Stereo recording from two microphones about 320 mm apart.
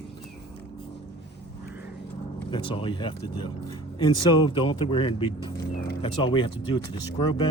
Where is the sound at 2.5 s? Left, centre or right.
Centre.